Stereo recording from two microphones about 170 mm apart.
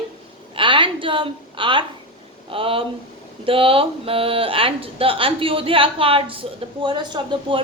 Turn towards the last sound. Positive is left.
turn(degrees=-25)  # may be behind; listen again after turning